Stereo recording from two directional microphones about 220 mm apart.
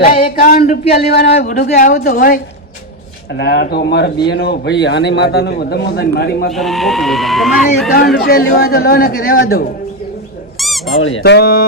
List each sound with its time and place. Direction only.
0.0 s a man's voice: 40° left (ahead or behind)
6.5 s speech: centre (ahead or behind)
8.2 s speech: 45° left (ahead or behind)
10.6 s squeak: centre (ahead or behind)
11.2 s speech: 45° left (ahead or behind)